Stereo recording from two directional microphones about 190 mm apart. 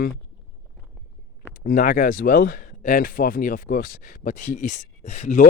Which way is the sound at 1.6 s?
50° left (ahead or behind).